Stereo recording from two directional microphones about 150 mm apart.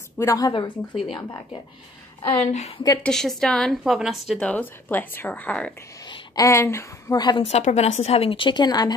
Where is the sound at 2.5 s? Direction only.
45° left (ahead or behind).